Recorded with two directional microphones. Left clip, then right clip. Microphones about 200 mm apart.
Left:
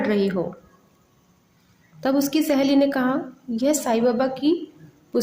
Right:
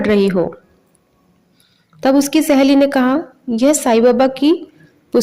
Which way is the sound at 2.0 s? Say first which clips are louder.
Right 8 dB; 45° right (ahead or behind).